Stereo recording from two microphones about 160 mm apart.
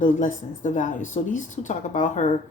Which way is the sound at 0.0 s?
50° left (ahead or behind).